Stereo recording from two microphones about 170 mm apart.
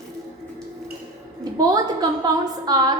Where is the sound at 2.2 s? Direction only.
25° right (ahead or behind).